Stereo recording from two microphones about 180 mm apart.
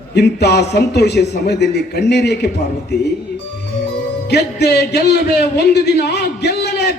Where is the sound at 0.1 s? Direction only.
65° left (ahead or behind).